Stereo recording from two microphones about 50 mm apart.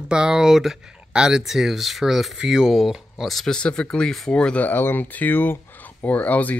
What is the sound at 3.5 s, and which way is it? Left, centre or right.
Speech, centre.